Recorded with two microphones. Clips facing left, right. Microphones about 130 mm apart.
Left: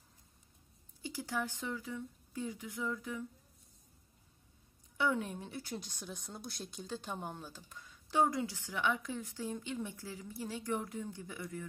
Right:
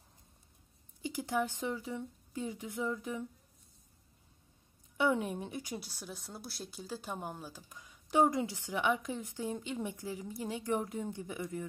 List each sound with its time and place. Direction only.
1.0 s speech: 20° right (ahead or behind)
4.9 s speech: 20° right (ahead or behind)